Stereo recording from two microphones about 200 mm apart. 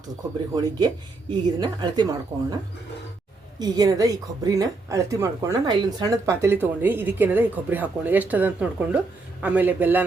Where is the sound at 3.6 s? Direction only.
20° right (ahead or behind).